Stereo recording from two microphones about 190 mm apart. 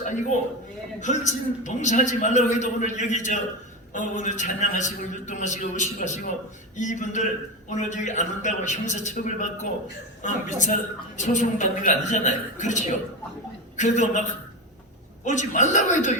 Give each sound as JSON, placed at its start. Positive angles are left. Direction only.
{"t": 0.0, "sound": "a man's voice", "side_deg": 40}
{"t": 15.2, "sound": "a man's voice", "side_deg": 40}